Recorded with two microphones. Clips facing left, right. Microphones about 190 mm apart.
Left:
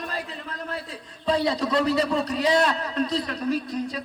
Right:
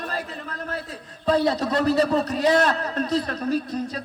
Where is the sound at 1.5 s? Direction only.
40° right (ahead or behind).